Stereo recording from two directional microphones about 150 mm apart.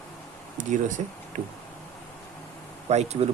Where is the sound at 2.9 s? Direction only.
45° right (ahead or behind).